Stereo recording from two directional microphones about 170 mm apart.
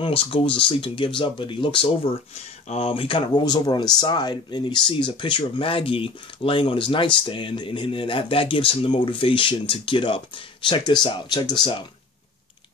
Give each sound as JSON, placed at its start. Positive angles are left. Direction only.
{"t": 0.0, "sound": "speech", "side_deg": 30}